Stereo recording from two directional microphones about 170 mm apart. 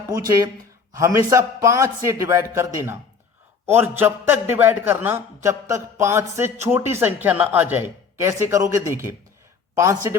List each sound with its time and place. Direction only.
0.9 s a man's voice: 15° right (ahead or behind)